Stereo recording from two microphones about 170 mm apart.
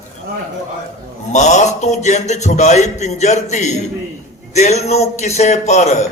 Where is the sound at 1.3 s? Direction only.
45° left (ahead or behind).